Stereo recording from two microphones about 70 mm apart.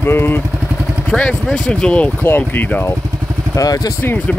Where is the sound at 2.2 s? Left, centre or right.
Left.